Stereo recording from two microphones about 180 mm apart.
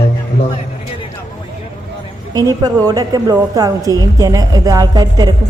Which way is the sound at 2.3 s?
20° right (ahead or behind).